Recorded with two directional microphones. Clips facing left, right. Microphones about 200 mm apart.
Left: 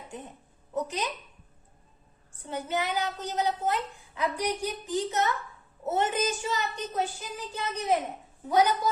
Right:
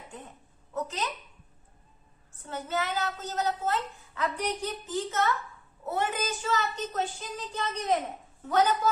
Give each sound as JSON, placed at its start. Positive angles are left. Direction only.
{"t": 0.7, "sound": "a woman's voice", "side_deg": 15}
{"t": 2.5, "sound": "a child's voice", "side_deg": 15}